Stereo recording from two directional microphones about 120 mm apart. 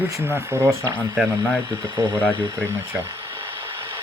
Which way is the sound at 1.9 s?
30° right (ahead or behind).